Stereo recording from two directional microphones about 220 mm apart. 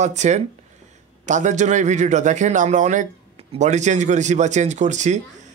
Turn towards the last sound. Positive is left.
turn(degrees=-35)  # may be behind; listen again after turning